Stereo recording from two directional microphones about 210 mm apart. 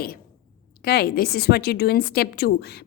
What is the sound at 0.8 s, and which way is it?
A woman's voice, 50° left (ahead or behind).